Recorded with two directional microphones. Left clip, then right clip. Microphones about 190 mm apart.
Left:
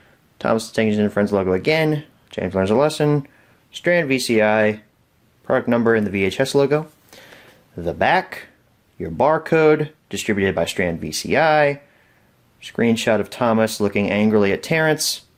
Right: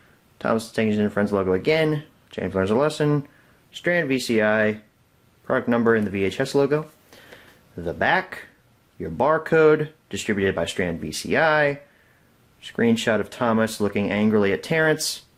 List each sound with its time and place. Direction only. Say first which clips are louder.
0.3 s speech: left 4 dB; 30° left (ahead or behind)